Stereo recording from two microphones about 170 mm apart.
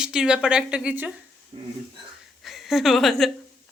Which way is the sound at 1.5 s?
30° right (ahead or behind).